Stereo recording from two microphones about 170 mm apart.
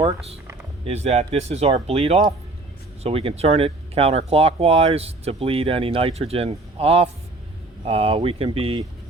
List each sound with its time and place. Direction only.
0.9 s speech: 40° right (ahead or behind)